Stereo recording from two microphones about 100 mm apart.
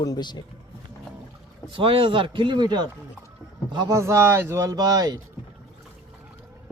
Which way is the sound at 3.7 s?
35° right (ahead or behind).